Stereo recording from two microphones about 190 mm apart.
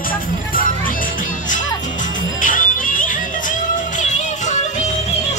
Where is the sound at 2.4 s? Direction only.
45° left (ahead or behind).